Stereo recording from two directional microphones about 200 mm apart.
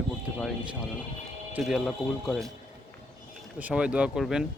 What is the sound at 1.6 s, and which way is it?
Speech, centre (ahead or behind).